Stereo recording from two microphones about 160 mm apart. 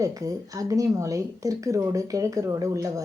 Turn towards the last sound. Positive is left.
turn(degrees=-20)  # may be behind; listen again after turning